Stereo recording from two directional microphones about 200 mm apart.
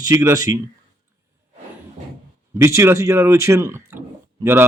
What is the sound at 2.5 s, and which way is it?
Speech, 15° right (ahead or behind).